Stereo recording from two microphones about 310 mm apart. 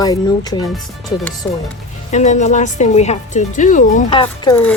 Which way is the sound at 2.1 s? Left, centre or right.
Left.